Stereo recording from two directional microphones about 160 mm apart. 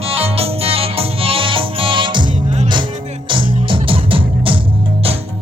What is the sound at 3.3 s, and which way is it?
Music, 30° right (ahead or behind).